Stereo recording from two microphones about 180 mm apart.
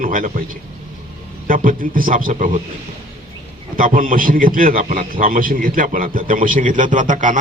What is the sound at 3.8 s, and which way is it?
A man's voice, 50° right (ahead or behind).